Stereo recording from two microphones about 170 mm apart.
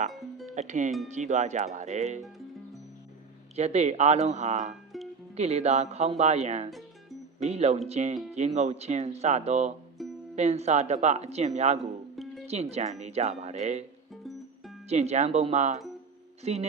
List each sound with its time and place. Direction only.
0.1 s speech: centre (ahead or behind)
0.5 s speech: 45° right (ahead or behind)
3.5 s speech: 40° right (ahead or behind)
6.7 s music: centre (ahead or behind)
7.4 s speech: 40° right (ahead or behind)
10.0 s music: centre (ahead or behind)
10.3 s speech: 40° right (ahead or behind)
11.8 s music: centre (ahead or behind)
12.5 s speech: 40° right (ahead or behind)
14.8 s speech: 40° right (ahead or behind)